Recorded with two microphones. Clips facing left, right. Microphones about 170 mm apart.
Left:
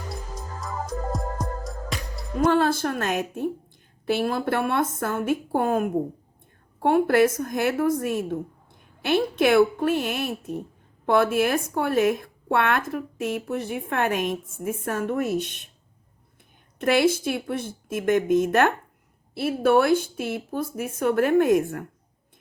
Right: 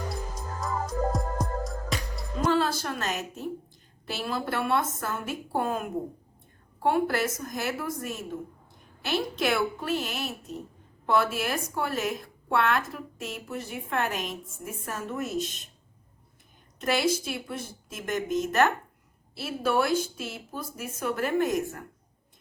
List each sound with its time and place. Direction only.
1.1 s music: centre (ahead or behind)
2.4 s a woman's voice: 55° left (ahead or behind)
16.7 s speech: 55° left (ahead or behind)